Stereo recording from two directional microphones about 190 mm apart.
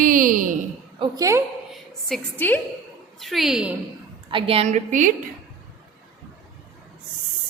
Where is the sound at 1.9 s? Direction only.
Centre (ahead or behind).